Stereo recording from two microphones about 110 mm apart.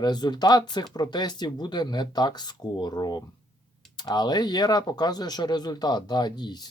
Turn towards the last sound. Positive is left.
turn(degrees=40)  # may be behind; listen again after turning